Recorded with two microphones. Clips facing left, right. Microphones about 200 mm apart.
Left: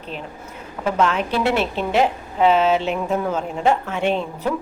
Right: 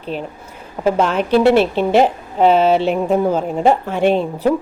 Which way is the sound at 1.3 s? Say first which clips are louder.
Right 8 dB; 30° right (ahead or behind).